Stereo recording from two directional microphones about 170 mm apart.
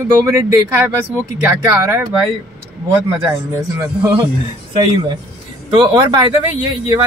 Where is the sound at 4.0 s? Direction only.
10° right (ahead or behind).